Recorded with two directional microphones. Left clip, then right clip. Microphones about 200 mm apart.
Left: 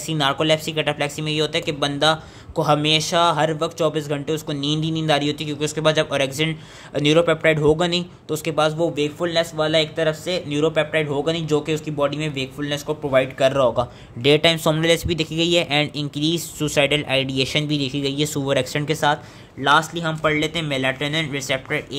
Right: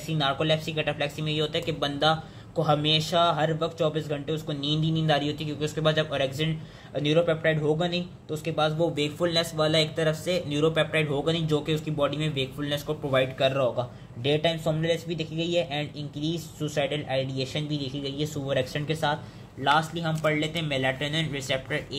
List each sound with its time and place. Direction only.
0.1 s speech: 30° left (ahead or behind)
8.9 s a man's voice: 10° left (ahead or behind); by 21.8 s 25° left (ahead or behind)